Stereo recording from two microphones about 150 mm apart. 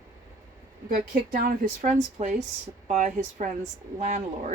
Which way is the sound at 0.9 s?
65° right (ahead or behind).